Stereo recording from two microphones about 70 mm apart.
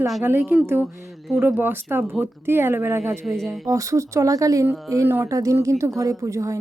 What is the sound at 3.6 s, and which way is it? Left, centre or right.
Speech, right.